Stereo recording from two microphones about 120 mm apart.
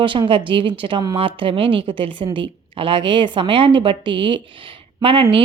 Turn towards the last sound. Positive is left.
turn(degrees=-50)  # may be behind; listen again after turning